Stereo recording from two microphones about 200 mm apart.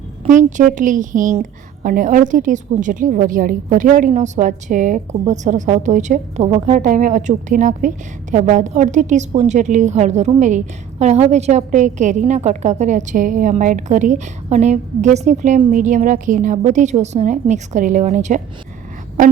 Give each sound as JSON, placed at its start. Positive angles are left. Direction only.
{"t": 0.3, "sound": "a woman's voice", "side_deg": -40}